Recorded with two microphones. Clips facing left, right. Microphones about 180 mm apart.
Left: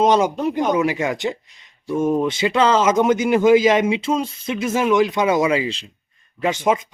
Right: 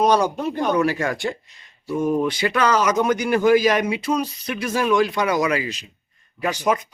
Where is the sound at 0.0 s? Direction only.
20° left (ahead or behind).